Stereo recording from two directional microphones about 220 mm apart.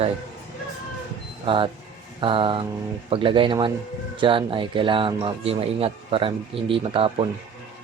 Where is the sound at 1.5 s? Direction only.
25° right (ahead or behind).